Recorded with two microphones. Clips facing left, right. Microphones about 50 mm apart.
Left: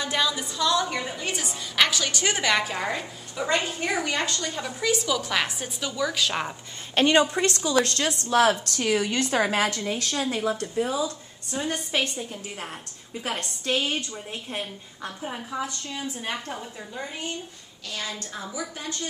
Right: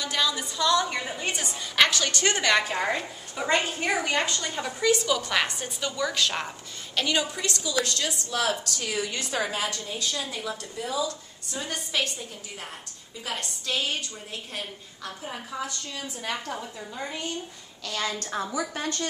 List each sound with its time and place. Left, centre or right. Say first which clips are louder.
0.2 s a woman's voice: right 1 dB; centre
2.7 s a woman's voice: right 2 dB; centre
3.3 s a woman's voice: even; right
4.6 s a woman's voice: right 3 dB; centre
7.0 s a woman's voice: left 7 dB; left
10.1 s speech: left 6 dB; left
11.1 s a woman's voice: left 1 dB; left
15.2 s a woman's voice: left 4 dB; centre
15.6 s a woman's voice: left 2 dB; centre
17.8 s a woman's voice: right 3 dB; right